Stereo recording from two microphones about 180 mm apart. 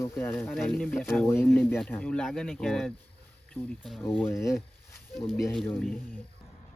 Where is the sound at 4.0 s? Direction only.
10° left (ahead or behind).